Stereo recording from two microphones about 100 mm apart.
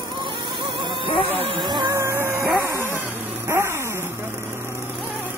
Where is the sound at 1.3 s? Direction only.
65° right (ahead or behind).